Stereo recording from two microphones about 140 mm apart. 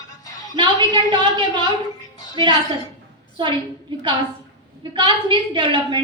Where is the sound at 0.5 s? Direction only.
35° right (ahead or behind).